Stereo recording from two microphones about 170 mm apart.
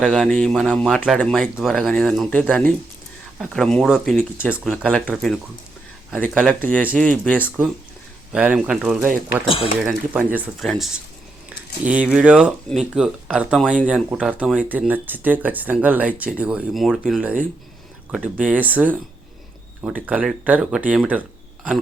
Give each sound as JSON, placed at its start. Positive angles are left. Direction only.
{"t": 0.0, "sound": "speech", "side_deg": 5}
{"t": 4.5, "sound": "speech", "side_deg": 0}
{"t": 6.4, "sound": "speech", "side_deg": 10}
{"t": 7.3, "sound": "speech", "side_deg": -5}
{"t": 9.5, "sound": "speech", "side_deg": 30}
{"t": 9.8, "sound": "speech", "side_deg": -10}
{"t": 11.4, "sound": "a sound", "side_deg": -10}
{"t": 12.1, "sound": "speech", "side_deg": -5}